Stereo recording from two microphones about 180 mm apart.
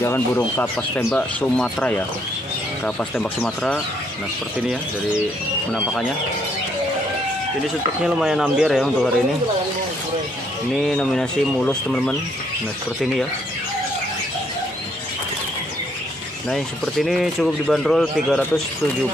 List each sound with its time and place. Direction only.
0.0 s speech: 10° left (ahead or behind)
8.0 s speech: 5° right (ahead or behind)
10.8 s speech: 5° left (ahead or behind)
16.4 s speech: centre (ahead or behind)